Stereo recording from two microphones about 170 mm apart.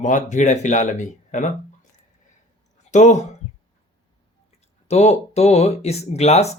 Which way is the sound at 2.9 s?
45° left (ahead or behind).